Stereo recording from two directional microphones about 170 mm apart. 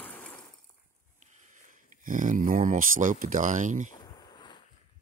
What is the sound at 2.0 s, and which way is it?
Speech, 50° right (ahead or behind).